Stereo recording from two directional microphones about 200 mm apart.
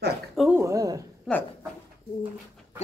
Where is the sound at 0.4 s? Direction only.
10° right (ahead or behind).